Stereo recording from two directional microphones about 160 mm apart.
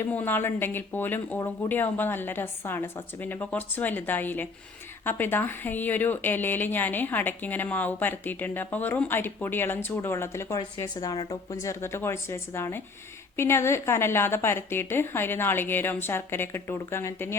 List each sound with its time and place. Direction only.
0.0 s speech: 10° left (ahead or behind)